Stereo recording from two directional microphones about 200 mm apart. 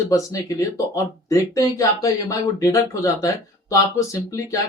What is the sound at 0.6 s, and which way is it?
Speech, 15° left (ahead or behind).